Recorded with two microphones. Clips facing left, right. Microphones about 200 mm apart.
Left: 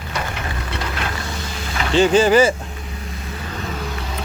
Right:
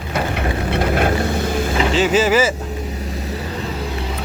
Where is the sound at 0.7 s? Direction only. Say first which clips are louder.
Right 11 dB; 55° right (ahead or behind).